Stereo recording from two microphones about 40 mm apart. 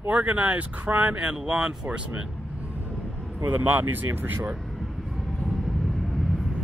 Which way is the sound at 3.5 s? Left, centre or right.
Right.